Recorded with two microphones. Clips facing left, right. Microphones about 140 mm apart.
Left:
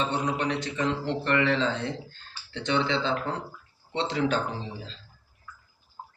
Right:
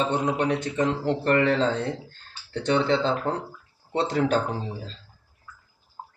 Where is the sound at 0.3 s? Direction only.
50° right (ahead or behind).